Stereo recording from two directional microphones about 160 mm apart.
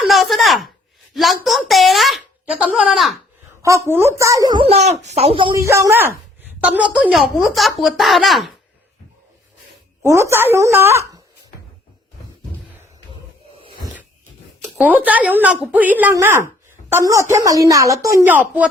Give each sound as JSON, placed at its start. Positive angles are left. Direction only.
{"t": 0.0, "sound": "a sound", "side_deg": 0}
{"t": 1.1, "sound": "a woman's voice", "side_deg": 0}
{"t": 3.8, "sound": "speech", "side_deg": -15}
{"t": 5.5, "sound": "a woman's voice", "side_deg": -20}
{"t": 10.0, "sound": "a woman's voice", "side_deg": -15}
{"t": 14.8, "sound": "a woman's voice", "side_deg": -10}